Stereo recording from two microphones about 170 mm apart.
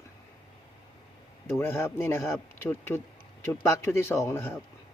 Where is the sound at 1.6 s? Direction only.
15° left (ahead or behind).